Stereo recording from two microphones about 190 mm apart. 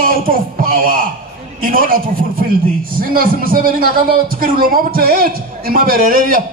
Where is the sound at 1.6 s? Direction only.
45° right (ahead or behind).